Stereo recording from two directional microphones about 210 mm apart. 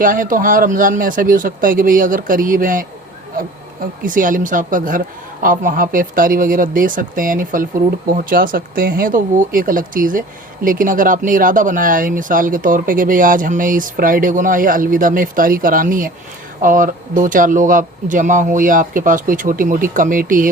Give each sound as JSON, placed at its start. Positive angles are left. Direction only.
{"t": 0.0, "sound": "speech", "side_deg": -40}
{"t": 4.0, "sound": "speech", "side_deg": -40}